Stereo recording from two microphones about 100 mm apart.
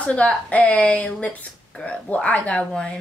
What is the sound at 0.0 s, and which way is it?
Speech, 10° left (ahead or behind).